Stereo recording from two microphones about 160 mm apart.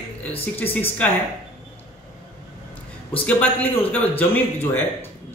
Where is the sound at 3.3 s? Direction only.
10° left (ahead or behind).